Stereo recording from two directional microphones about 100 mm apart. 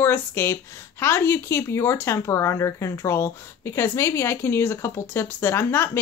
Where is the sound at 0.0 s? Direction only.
25° left (ahead or behind).